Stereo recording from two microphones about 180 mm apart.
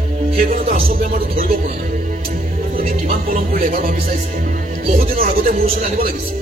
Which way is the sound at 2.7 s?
50° right (ahead or behind).